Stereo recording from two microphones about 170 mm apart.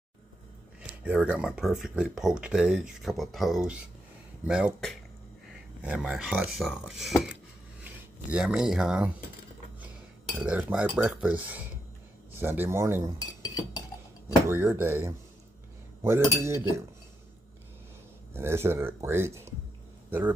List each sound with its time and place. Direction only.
1.0 s speech: 5° right (ahead or behind)
10.4 s speech: 5° right (ahead or behind)
13.4 s chink: 20° left (ahead or behind)
14.5 s speech: 15° right (ahead or behind)
18.3 s a man's voice: 15° right (ahead or behind)